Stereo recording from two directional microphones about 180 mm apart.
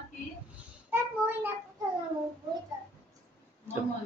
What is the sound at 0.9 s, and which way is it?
Child singing, 10° right (ahead or behind).